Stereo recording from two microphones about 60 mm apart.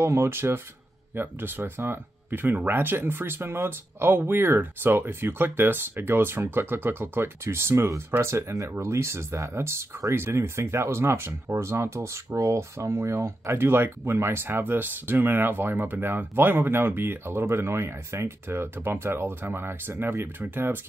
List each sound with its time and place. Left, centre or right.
0.0 s speech: right